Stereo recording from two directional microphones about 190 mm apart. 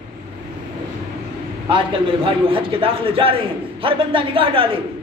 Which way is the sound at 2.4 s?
30° right (ahead or behind).